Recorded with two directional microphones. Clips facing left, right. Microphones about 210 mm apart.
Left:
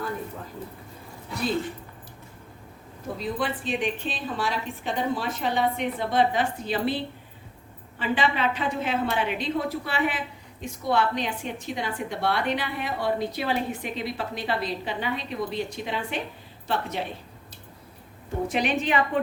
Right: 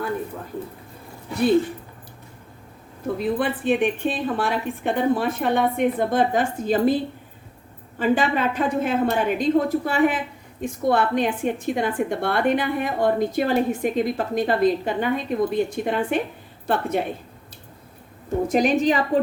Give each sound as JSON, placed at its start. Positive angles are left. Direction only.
{"t": 3.2, "sound": "a woman's voice", "side_deg": -60}
{"t": 18.4, "sound": "a woman's voice", "side_deg": -40}